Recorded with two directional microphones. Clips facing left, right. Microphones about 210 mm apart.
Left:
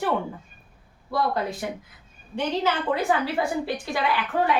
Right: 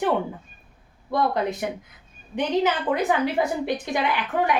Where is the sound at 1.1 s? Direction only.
20° right (ahead or behind).